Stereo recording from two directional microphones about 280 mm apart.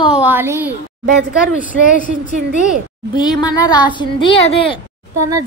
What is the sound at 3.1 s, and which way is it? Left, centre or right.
Speech, centre.